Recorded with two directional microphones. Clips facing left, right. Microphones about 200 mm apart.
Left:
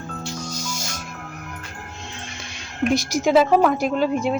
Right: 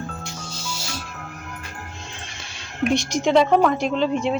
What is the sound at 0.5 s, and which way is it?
Music, 45° left (ahead or behind).